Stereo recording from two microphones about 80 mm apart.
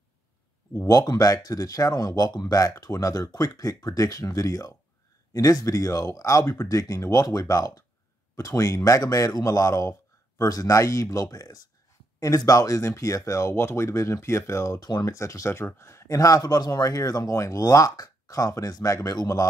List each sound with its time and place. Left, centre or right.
0.8 s speech: left
14.8 s speech: left
15.0 s speech: left